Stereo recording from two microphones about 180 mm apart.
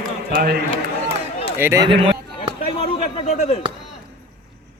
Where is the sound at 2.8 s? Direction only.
35° left (ahead or behind).